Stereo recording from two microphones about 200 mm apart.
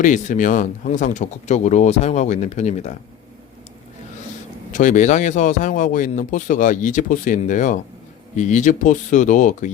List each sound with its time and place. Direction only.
0.0 s speech: 40° left (ahead or behind)
4.7 s speech: 40° left (ahead or behind)